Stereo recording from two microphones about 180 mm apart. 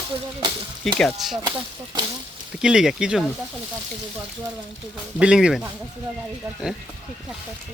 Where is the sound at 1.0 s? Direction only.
Centre (ahead or behind).